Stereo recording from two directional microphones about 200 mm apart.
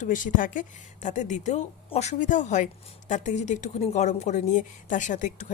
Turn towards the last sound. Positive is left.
turn(degrees=40)  # may be behind; listen again after turning